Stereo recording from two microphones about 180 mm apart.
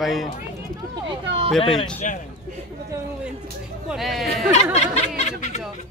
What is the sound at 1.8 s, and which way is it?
Speech, 35° left (ahead or behind).